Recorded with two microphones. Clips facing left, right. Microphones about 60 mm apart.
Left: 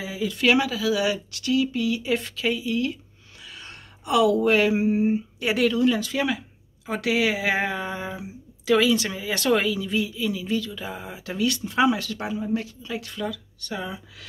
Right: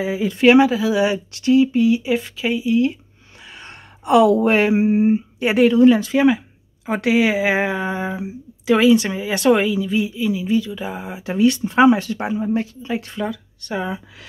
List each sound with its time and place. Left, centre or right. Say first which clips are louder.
0.0 s speech: right 8 dB; right
2.0 s speech: right 4 dB; centre; by 14.0 s right